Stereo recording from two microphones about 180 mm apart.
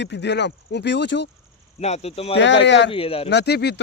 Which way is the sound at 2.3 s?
80° left.